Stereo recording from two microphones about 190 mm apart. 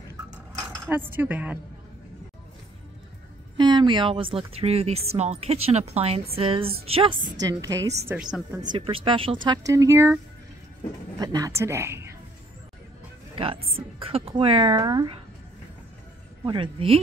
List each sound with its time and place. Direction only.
0.6 s speech: 10° right (ahead or behind)
3.5 s speech: 25° right (ahead or behind)
7.3 s speech: 20° right (ahead or behind)
8.1 s a woman's voice: 5° right (ahead or behind)
8.7 s speech: 25° right (ahead or behind)
11.1 s speech: 20° right (ahead or behind)
13.7 s speech: 30° right (ahead or behind)
16.4 s speech: 25° right (ahead or behind)